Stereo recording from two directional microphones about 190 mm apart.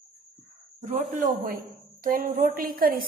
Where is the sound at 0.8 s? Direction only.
45° right (ahead or behind).